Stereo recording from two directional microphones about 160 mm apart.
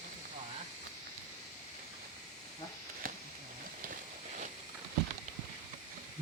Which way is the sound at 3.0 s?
60° right (ahead or behind).